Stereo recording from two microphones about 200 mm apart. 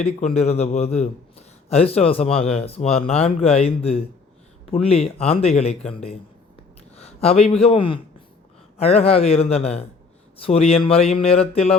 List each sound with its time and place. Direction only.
0.3 s a man's voice: 30° left (ahead or behind)